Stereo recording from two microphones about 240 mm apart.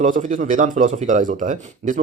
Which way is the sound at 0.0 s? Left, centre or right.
Right.